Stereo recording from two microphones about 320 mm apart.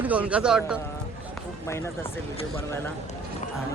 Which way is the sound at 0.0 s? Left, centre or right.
Centre.